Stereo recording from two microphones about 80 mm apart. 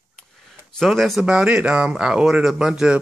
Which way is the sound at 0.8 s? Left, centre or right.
Centre.